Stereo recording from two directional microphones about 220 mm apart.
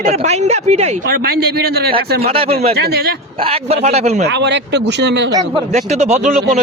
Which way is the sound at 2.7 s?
45° right (ahead or behind).